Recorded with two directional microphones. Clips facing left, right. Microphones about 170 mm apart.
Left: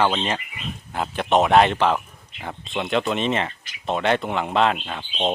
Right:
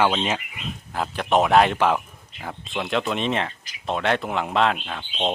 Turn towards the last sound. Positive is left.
turn(degrees=0)  # may be behind; listen again after turning